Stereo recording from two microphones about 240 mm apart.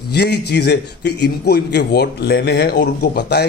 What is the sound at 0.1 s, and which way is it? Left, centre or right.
A man's voice, left.